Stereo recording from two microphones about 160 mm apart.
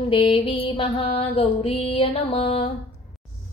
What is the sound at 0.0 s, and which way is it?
Mantra, 35° left (ahead or behind).